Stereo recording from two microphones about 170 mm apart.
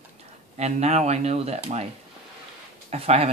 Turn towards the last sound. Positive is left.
turn(degrees=-35)  # may be behind; listen again after turning